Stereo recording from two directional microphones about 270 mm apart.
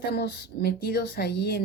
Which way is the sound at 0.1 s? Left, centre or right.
Left.